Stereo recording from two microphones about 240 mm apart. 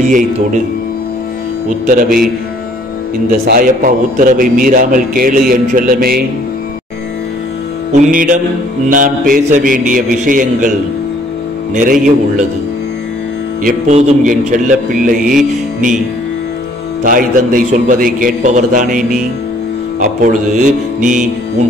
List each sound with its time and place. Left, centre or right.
1.9 s a man's voice: right
3.4 s a man's voice: right
8.0 s a man's voice: right
11.7 s a man's voice: right
13.7 s a man's voice: right
17.0 s a man's voice: right
20.0 s a man's voice: right